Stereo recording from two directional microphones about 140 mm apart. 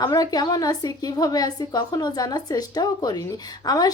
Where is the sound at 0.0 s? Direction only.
25° left (ahead or behind).